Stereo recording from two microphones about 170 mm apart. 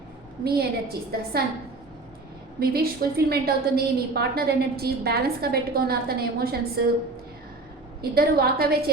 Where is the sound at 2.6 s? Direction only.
65° right (ahead or behind).